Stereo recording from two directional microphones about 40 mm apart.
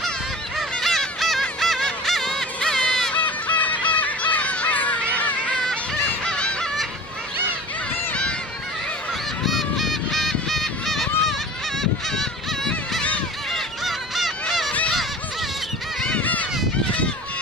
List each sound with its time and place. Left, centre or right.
0.7 s honk: centre
3.2 s crow: left
5.1 s a sound: left
6.2 s honk: left
9.4 s honk: centre
16.2 s a sound: left